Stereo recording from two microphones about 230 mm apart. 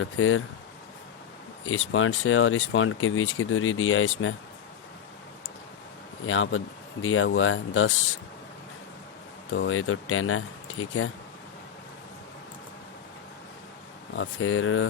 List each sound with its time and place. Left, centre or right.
0.0 s speech: left
1.6 s speech: left
6.2 s speech: left
9.5 s speech: left
14.2 s speech: left